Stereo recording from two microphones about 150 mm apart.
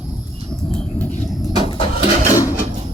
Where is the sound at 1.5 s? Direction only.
40° left (ahead or behind).